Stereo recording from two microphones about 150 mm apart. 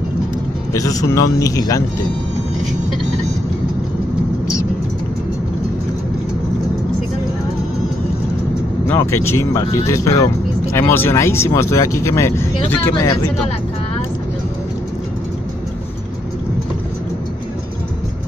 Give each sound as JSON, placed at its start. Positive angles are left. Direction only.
{"t": 0.7, "sound": "speech", "side_deg": 20}
{"t": 8.8, "sound": "speech", "side_deg": 15}